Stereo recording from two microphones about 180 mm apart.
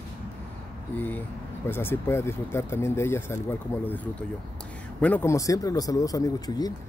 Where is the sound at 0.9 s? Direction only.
10° left (ahead or behind).